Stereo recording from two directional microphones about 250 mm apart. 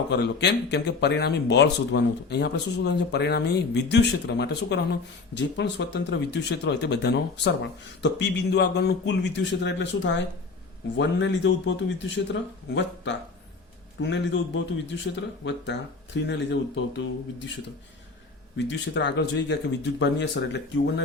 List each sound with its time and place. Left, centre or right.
0.1 s speech: left
18.5 s speech: left